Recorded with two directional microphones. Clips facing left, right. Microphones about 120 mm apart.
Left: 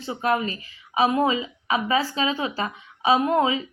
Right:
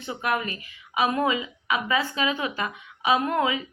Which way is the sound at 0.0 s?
30° left (ahead or behind).